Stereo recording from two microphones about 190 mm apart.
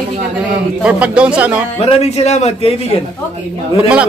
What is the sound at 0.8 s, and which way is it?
Speech, 5° right (ahead or behind).